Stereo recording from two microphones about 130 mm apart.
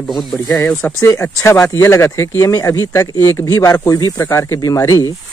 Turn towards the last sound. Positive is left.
turn(degrees=25)  # may be behind; listen again after turning